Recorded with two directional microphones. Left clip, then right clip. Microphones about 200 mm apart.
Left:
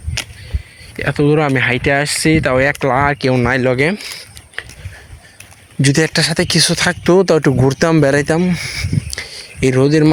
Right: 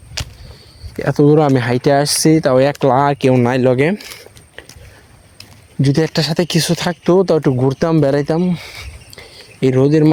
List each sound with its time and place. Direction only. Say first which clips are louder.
0.2 s a sound: left 3 dB; 5° left (ahead or behind)
1.1 s speech: right 3 dB; 15° right (ahead or behind)
1.5 s speech: even; 40° right (ahead or behind)
4.6 s dog: left 9 dB; 20° right (ahead or behind)
5.8 s speech: left 2 dB; 10° right (ahead or behind)
6.1 s speech: left 3 dB; 20° right (ahead or behind)
7.0 s speech: even; centre (ahead or behind)
9.6 s speech: even; 15° right (ahead or behind)